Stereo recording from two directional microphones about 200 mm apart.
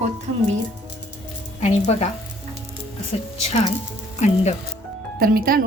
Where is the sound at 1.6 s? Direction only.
35° left (ahead or behind).